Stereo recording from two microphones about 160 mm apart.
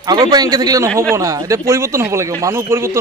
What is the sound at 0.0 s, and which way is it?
A man's voice, 25° right (ahead or behind).